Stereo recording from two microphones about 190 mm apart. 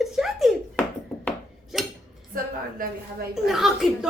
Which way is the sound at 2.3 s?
45° right (ahead or behind).